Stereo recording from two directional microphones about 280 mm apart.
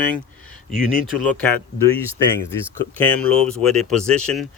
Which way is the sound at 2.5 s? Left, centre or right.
Centre.